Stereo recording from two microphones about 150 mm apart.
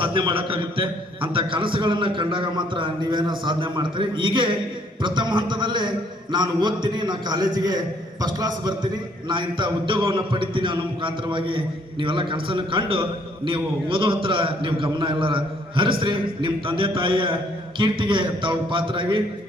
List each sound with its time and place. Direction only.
0.0 s a man's voice: 35° right (ahead or behind)